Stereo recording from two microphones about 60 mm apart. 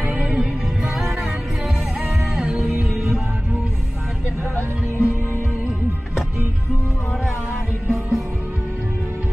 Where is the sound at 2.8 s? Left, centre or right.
Centre.